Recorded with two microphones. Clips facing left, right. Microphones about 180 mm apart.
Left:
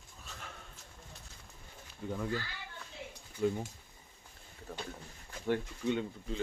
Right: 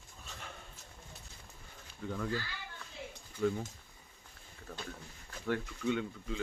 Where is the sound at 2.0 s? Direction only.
15° left (ahead or behind).